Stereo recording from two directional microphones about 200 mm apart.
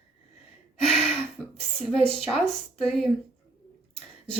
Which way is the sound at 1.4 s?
10° left (ahead or behind).